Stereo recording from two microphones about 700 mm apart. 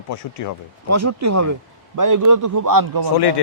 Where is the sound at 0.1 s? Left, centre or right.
Left.